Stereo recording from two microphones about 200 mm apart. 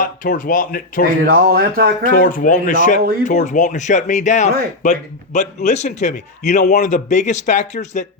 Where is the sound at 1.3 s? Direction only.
50° right (ahead or behind).